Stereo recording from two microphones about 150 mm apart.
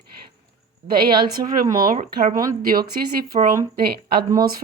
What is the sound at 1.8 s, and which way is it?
Speech, 55° right (ahead or behind).